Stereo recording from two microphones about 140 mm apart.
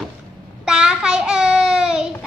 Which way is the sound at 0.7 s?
5° right (ahead or behind).